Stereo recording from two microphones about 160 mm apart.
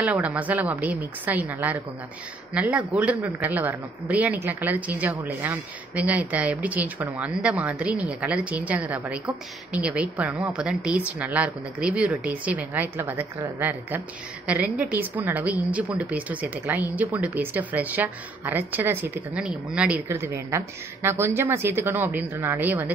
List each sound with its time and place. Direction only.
0.0 s a man's voice: 10° right (ahead or behind)